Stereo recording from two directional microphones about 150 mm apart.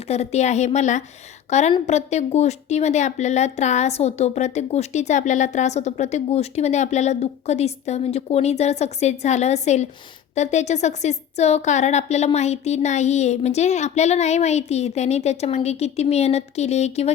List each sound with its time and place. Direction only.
0.1 s a woman's voice: 45° left (ahead or behind)